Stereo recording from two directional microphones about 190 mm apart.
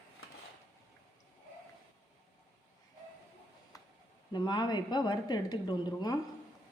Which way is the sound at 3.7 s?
15° left (ahead or behind).